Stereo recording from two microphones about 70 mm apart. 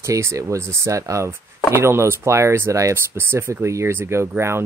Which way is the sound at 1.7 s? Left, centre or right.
Right.